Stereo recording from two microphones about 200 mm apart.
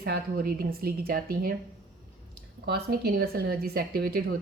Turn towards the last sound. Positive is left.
turn(degrees=-50)  # may be behind; listen again after turning